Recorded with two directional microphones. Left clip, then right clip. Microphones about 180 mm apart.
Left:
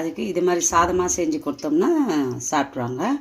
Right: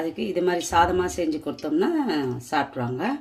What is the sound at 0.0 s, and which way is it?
Speech, centre (ahead or behind).